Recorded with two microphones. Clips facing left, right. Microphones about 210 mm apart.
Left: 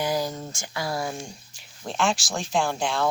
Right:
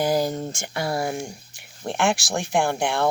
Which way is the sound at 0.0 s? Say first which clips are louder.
Right 5 dB; 35° right (ahead or behind).